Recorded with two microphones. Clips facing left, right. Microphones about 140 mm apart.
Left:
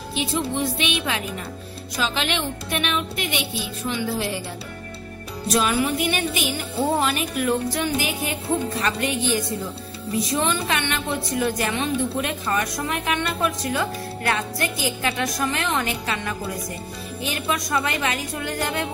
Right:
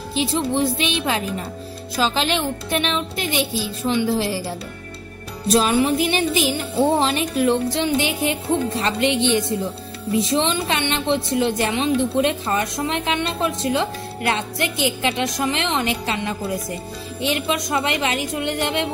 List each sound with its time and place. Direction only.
0.1 s speech: 30° right (ahead or behind)
5.5 s a woman's voice: 30° right (ahead or behind)